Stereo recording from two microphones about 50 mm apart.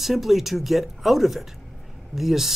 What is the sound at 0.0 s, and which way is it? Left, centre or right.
Speech, centre.